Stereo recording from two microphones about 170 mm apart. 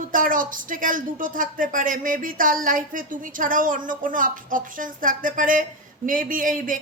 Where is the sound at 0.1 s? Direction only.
55° right (ahead or behind).